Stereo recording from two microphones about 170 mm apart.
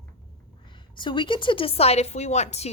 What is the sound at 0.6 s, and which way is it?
Speech, 30° left (ahead or behind).